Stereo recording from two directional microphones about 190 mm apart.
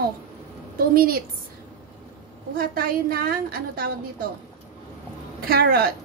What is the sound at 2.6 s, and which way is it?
A woman's voice, 50° right (ahead or behind).